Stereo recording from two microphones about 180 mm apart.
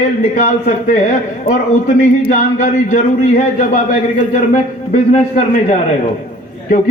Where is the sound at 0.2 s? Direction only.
40° left (ahead or behind).